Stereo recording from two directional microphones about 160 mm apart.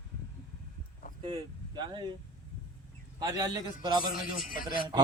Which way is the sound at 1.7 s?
30° right (ahead or behind).